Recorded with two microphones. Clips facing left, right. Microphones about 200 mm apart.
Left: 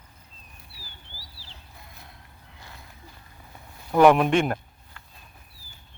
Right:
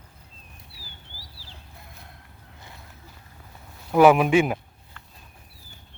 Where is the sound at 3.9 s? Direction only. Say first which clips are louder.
Right 1 dB; 5° right (ahead or behind).